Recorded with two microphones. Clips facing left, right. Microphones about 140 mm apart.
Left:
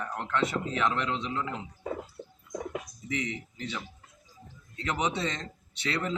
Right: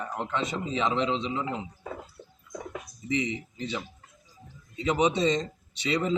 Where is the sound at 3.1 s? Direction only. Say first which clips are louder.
Right 5 dB; 15° right (ahead or behind).